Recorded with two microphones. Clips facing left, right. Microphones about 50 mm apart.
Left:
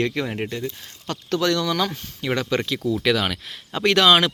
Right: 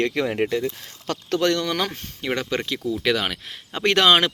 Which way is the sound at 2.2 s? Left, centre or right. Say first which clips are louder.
Left 2 dB; centre.